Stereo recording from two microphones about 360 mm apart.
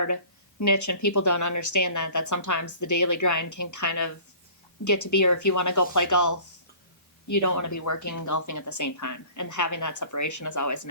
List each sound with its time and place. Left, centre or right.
0.6 s speech: left